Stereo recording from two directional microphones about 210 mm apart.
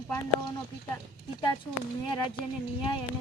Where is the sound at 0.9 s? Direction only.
20° left (ahead or behind).